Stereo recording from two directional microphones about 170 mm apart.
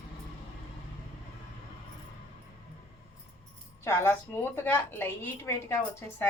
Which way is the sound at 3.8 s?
15° left (ahead or behind).